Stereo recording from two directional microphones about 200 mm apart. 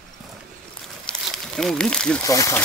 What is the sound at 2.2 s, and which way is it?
Speech, 15° left (ahead or behind).